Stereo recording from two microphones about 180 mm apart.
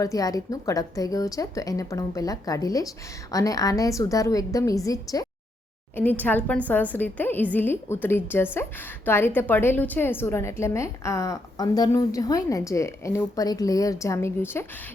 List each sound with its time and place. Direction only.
0.0 s a woman's voice: 20° left (ahead or behind)